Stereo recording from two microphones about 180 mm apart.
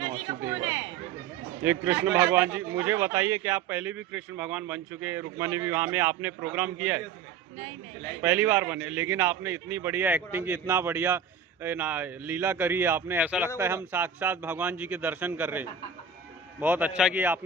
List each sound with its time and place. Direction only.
0.0 s chatter: 25° right (ahead or behind)
1.6 s speech: 10° right (ahead or behind)
8.2 s speech: 10° right (ahead or behind)